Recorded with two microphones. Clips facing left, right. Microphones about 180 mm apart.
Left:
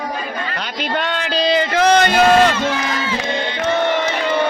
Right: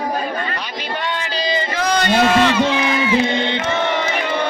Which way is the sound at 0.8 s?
65° left (ahead or behind).